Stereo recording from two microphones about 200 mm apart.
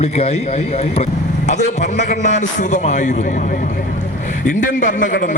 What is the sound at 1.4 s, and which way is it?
A man's voice, 35° left (ahead or behind).